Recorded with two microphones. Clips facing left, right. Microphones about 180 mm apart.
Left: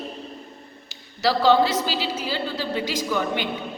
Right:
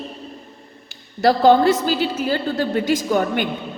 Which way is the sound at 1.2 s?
50° right (ahead or behind).